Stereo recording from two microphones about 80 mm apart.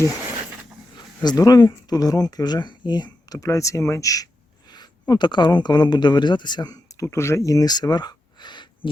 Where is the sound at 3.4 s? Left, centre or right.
Left.